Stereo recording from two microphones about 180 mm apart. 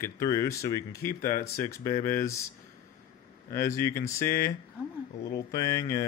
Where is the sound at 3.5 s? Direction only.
15° left (ahead or behind).